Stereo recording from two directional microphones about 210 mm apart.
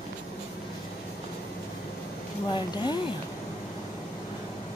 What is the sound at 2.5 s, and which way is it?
Speech, 20° left (ahead or behind).